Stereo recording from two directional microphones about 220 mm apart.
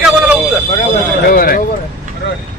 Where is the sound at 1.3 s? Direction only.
40° left (ahead or behind).